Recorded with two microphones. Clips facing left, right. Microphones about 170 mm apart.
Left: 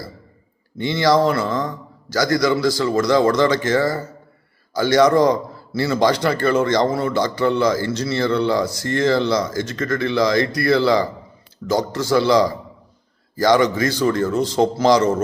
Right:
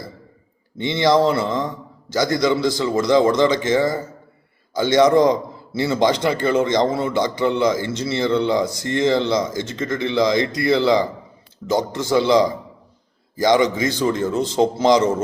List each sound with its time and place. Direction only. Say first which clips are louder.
0.8 s a man's voice: even; 25° right (ahead or behind)